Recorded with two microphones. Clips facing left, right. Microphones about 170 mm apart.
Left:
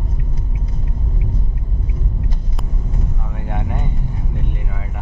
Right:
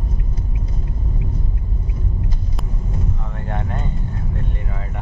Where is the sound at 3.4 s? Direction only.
10° left (ahead or behind).